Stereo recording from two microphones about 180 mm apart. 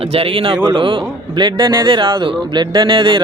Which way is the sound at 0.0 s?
30° right (ahead or behind).